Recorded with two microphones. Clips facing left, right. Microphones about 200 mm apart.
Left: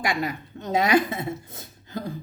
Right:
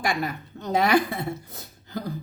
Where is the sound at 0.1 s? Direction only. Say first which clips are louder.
Left 1 dB; 20° left (ahead or behind).